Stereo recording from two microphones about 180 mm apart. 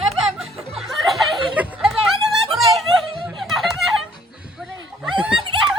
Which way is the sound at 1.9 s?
Centre (ahead or behind).